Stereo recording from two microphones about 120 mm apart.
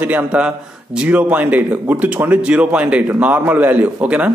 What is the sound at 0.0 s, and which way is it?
A man's voice, 10° right (ahead or behind).